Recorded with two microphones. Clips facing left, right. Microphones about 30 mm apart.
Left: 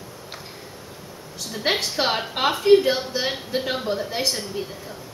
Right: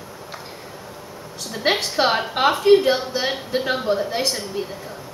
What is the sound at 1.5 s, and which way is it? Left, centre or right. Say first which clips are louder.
A woman's voice: right 2 dB; centre.